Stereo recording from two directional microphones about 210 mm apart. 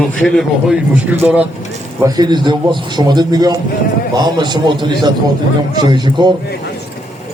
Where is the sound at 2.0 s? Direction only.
20° right (ahead or behind).